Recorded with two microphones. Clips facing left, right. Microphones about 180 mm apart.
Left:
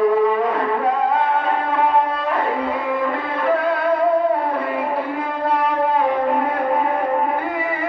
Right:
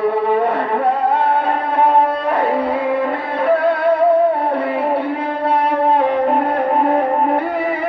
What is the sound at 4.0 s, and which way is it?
Music, 65° right (ahead or behind).